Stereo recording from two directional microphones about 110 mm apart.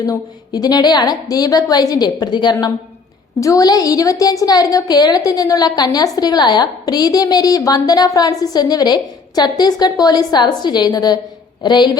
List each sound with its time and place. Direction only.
0.0 s a woman's voice: 35° left (ahead or behind)